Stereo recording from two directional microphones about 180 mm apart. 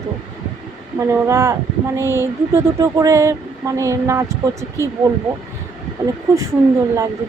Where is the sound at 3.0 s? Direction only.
15° right (ahead or behind).